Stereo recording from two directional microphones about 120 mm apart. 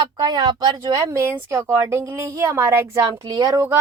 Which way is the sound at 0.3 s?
35° right (ahead or behind).